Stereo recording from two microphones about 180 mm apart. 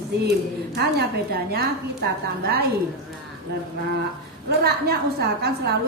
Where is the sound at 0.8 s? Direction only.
65° right (ahead or behind).